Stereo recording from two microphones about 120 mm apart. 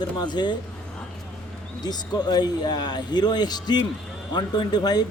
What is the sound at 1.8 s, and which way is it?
Speech, 35° left (ahead or behind).